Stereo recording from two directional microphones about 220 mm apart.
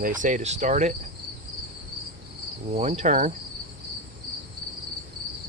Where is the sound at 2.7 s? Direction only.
30° right (ahead or behind).